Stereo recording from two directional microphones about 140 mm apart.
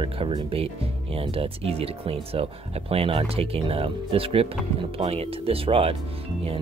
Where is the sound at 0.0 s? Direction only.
35° right (ahead or behind).